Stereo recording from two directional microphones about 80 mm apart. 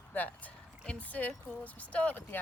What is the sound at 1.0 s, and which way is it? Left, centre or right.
Speech, centre.